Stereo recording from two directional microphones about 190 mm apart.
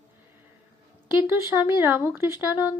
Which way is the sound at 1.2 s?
15° right (ahead or behind).